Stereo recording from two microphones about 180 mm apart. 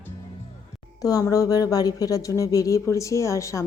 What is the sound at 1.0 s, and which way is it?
Speech, 20° left (ahead or behind).